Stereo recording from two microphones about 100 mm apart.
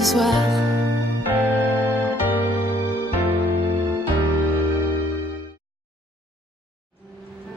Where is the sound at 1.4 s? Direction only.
15° right (ahead or behind).